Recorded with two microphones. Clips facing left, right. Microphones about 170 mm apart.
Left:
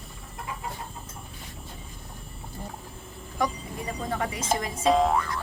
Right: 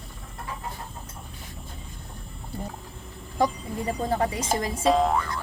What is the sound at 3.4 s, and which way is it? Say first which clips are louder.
Speech: right 4 dB; 30° right (ahead or behind).